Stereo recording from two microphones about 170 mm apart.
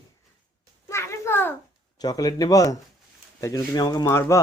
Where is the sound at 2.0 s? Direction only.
20° left (ahead or behind).